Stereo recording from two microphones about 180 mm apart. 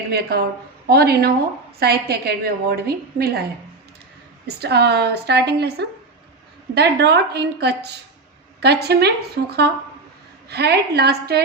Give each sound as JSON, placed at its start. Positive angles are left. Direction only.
{"t": 0.1, "sound": "a woman's voice", "side_deg": -60}
{"t": 4.4, "sound": "a woman's voice", "side_deg": -65}